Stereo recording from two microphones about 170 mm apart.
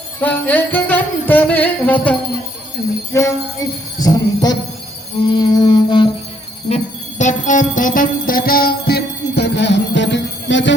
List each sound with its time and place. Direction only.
0.2 s jingle bell: 10° left (ahead or behind); by 6.1 s 25° left (ahead or behind)
6.7 s music: 40° left (ahead or behind); by 10.8 s 90° left